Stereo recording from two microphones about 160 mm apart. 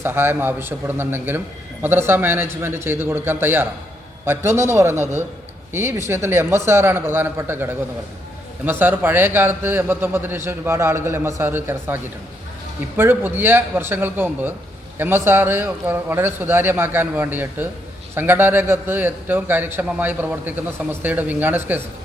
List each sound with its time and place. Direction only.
0.0 s a man's voice: 15° right (ahead or behind)
13.0 s a man's voice: 15° right (ahead or behind)